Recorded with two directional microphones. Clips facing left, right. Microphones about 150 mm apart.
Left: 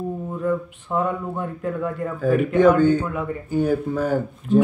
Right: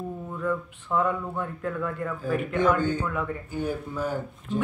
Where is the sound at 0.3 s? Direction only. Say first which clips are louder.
Left 4 dB; 20° left (ahead or behind).